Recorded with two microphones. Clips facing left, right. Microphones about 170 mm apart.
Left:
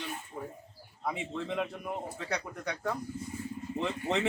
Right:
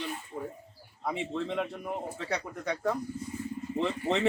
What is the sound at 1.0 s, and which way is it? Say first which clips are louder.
Speech: right 2 dB; centre (ahead or behind).